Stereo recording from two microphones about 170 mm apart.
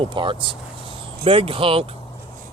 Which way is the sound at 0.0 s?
30° right (ahead or behind).